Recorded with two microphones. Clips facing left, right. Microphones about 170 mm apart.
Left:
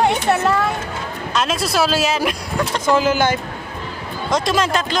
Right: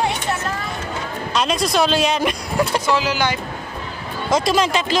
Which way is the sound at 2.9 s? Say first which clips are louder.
Left 4 dB; 50° left (ahead or behind).